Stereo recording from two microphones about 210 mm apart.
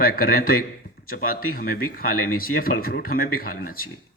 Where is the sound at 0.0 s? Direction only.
45° left (ahead or behind).